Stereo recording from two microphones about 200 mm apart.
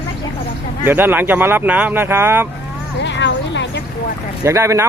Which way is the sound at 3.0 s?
60° left (ahead or behind).